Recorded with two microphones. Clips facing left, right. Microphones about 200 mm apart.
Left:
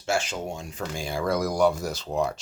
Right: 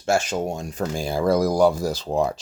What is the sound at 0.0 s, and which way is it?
Speech, 45° right (ahead or behind).